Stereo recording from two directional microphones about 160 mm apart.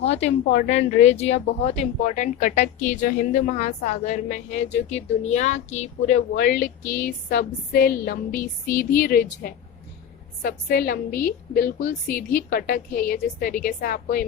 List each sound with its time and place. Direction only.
0.5 s speech: 45° left (ahead or behind)
6.3 s a woman's voice: 70° left (ahead or behind)